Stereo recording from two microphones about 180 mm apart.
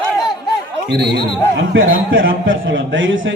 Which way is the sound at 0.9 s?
65° right (ahead or behind).